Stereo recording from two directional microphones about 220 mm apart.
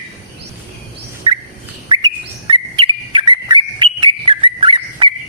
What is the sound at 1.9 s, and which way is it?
Bird, 20° right (ahead or behind).